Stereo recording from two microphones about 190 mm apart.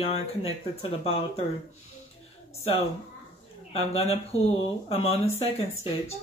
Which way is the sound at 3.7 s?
30° left (ahead or behind).